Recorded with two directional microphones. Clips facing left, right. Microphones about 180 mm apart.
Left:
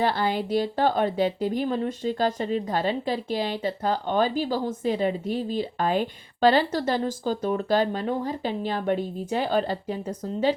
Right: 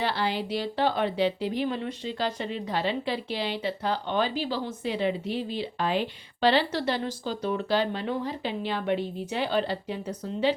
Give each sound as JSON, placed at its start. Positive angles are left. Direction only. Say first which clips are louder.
{"t": 0.0, "sound": "speech", "louder": "left 4 dB", "side_deg": 45}